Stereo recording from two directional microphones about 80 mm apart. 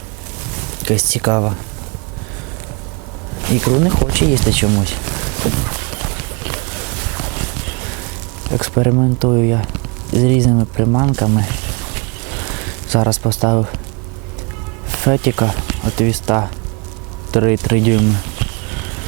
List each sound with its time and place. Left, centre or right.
0.9 s speech: centre
3.4 s speech: centre
8.5 s speech: centre
12.9 s speech: centre
14.9 s speech: centre